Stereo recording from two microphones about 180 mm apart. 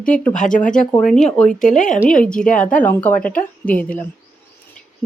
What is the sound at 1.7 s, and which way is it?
Speech, 45° left (ahead or behind).